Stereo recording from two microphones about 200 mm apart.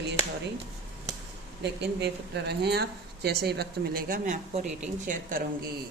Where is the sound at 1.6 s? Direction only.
55° right (ahead or behind).